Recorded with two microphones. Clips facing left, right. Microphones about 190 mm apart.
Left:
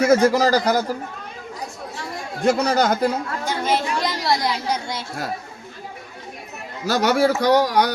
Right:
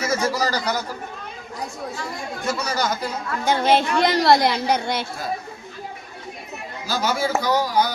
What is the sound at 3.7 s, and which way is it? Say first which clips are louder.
A woman's voice: right 4 dB; 70° right (ahead or behind).